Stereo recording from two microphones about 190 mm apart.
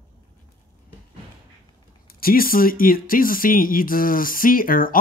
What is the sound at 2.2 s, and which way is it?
Speech, 50° left (ahead or behind).